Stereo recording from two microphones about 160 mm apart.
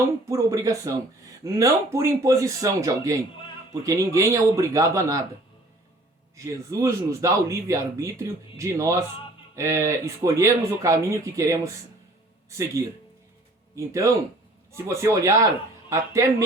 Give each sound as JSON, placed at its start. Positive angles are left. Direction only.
{"t": 0.3, "sound": "speech", "side_deg": -20}
{"t": 6.3, "sound": "speech", "side_deg": -20}